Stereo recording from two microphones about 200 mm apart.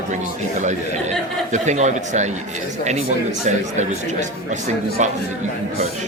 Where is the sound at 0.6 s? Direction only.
35° right (ahead or behind).